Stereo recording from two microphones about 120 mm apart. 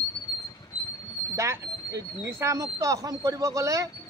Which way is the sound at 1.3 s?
25° right (ahead or behind).